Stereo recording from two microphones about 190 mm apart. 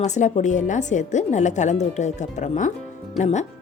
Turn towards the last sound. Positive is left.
turn(degrees=35)  # may be behind; listen again after turning